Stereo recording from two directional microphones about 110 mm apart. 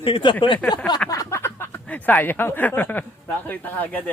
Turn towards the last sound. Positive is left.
turn(degrees=15)  # may be behind; listen again after turning